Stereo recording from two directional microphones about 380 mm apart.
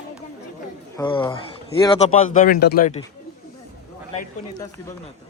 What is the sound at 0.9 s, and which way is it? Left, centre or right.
Speech, centre.